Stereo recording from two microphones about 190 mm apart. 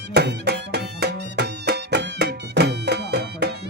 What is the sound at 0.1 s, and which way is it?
Music, 60° right (ahead or behind).